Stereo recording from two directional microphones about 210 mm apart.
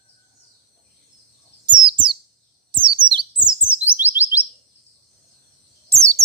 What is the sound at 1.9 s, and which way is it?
Bird, 25° right (ahead or behind).